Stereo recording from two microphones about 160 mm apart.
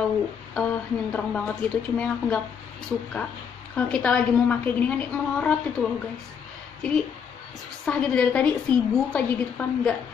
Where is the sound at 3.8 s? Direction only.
5° left (ahead or behind).